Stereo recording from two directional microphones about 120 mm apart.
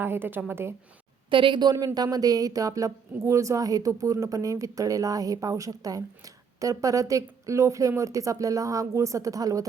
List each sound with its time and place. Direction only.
0.0 s a woman's voice: 20° right (ahead or behind)
1.3 s a woman's voice: 45° right (ahead or behind)
1.7 s speech: 30° right (ahead or behind)